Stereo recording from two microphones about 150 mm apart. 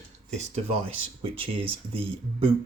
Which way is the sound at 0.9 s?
35° right (ahead or behind).